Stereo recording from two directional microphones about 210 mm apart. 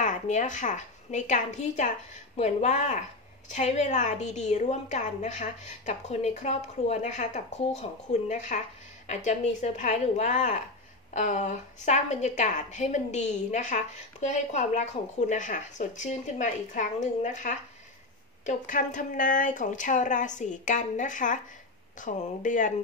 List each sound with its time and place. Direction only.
0.0 s a woman's voice: 35° left (ahead or behind)